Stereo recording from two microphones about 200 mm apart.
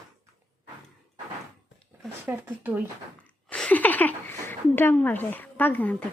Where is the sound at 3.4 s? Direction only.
5° left (ahead or behind).